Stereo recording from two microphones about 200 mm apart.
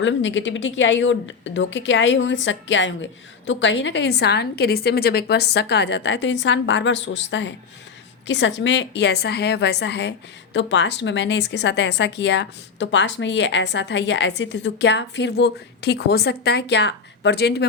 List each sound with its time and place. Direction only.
0.0 s a woman's voice: 70° left (ahead or behind)